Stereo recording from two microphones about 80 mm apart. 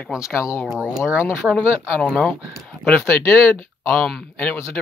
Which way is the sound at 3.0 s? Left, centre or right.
Left.